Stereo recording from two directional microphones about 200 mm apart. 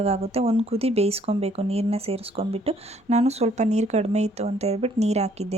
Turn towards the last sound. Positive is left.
turn(degrees=-35)  # may be behind; listen again after turning